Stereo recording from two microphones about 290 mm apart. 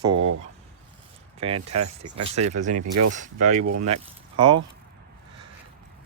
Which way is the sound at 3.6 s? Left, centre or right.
Right.